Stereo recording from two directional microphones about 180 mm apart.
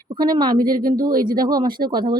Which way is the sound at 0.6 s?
50° right (ahead or behind).